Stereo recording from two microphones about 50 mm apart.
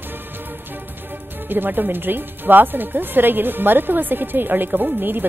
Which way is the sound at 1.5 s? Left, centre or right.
Right.